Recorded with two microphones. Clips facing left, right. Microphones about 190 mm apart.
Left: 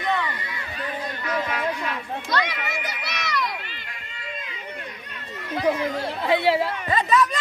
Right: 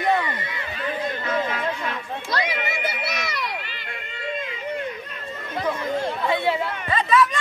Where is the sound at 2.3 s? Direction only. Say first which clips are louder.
Right 1 dB; 30° right (ahead or behind).